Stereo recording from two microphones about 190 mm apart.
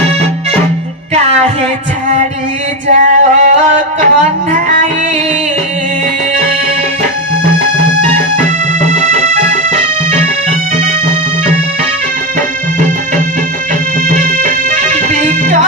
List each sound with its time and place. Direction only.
2.9 s singing: 40° right (ahead or behind)
4.0 s music: 40° right (ahead or behind)
8.7 s music: 40° right (ahead or behind)
12.4 s music: 40° right (ahead or behind)